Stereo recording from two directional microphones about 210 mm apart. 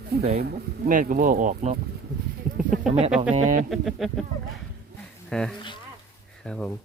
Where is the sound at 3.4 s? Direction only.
35° right (ahead or behind).